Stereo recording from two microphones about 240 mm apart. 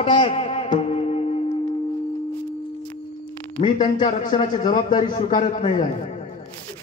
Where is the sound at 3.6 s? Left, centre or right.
Centre.